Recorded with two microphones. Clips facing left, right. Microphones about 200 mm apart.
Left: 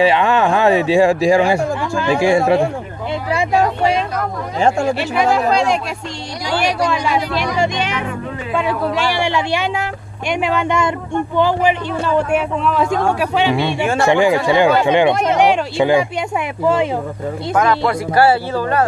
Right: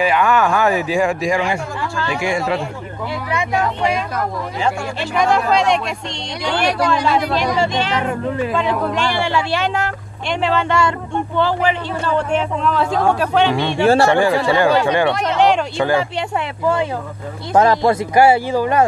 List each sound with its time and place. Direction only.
0.0 s speech: 25° left (ahead or behind)
4.6 s speech: 45° left (ahead or behind)
5.1 s speech: 5° left (ahead or behind)
15.2 s speech: 10° left (ahead or behind)
17.5 s speech: 30° right (ahead or behind)
18.1 s speech: 15° right (ahead or behind)